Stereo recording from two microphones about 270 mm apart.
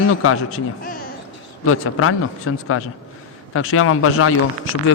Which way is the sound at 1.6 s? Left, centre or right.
Left.